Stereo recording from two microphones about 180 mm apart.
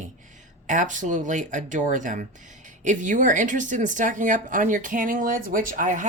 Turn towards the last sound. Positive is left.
turn(degrees=-45)  # may be behind; listen again after turning